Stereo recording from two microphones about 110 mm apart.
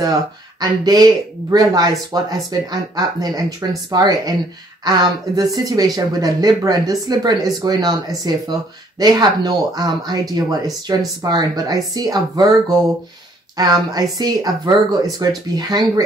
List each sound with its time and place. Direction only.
0.6 s speech: 40° right (ahead or behind)